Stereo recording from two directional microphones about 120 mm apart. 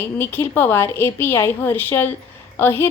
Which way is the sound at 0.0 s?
15° left (ahead or behind).